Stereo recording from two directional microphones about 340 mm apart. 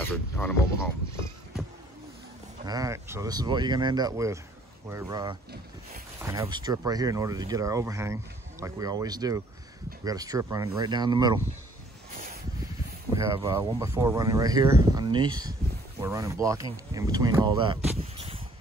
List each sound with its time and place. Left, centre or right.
0.0 s speech: centre
2.6 s speech: centre
13.1 s speech: centre